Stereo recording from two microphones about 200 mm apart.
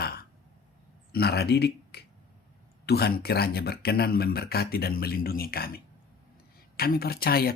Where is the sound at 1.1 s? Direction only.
50° left (ahead or behind).